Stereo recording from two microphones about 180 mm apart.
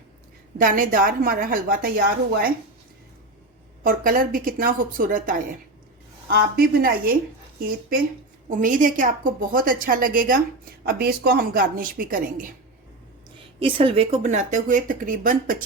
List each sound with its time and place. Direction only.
0.6 s a woman's voice: 50° right (ahead or behind)
3.8 s a woman's voice: 50° right (ahead or behind)
6.2 s a woman's voice: 60° right (ahead or behind)
8.4 s a woman's voice: 50° right (ahead or behind)
13.6 s a woman's voice: 30° right (ahead or behind); by 15.6 s 50° right (ahead or behind)